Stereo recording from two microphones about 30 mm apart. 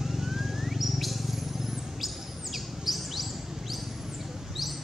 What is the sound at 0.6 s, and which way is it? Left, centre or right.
Bird, centre.